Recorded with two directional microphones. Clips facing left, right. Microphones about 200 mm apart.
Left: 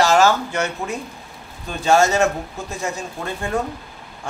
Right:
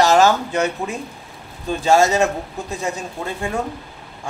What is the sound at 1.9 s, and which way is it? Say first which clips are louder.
Speech: right 1 dB; 15° right (ahead or behind).